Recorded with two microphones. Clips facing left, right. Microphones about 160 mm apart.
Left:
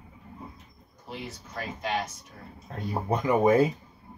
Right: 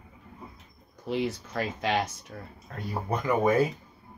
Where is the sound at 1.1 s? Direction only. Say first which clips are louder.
Right 10 dB; 90° right.